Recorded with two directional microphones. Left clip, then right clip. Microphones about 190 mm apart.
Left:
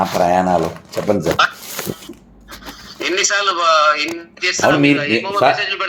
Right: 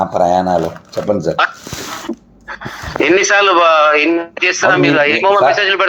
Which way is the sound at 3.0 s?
40° right (ahead or behind).